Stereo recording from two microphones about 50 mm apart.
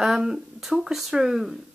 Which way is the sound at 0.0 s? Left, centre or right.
Centre.